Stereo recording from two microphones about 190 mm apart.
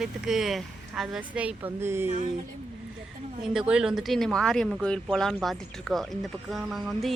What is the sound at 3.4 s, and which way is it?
Speech, 5° right (ahead or behind).